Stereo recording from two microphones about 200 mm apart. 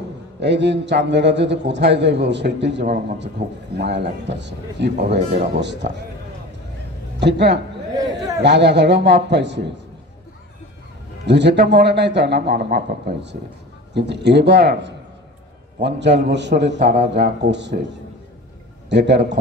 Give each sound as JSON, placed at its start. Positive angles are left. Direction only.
{"t": 0.4, "sound": "a man's voice", "side_deg": -60}
{"t": 7.2, "sound": "a man's voice", "side_deg": -60}
{"t": 11.2, "sound": "a man's voice", "side_deg": -60}
{"t": 18.9, "sound": "a man's voice", "side_deg": -60}